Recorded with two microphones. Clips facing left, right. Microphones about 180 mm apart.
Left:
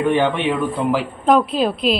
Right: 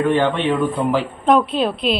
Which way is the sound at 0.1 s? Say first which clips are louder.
Even; 15° left (ahead or behind).